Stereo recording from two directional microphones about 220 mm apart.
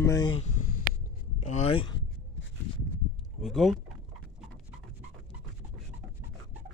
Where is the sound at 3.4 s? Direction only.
Centre (ahead or behind).